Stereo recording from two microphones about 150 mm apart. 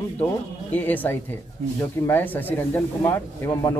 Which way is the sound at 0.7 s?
10° left (ahead or behind).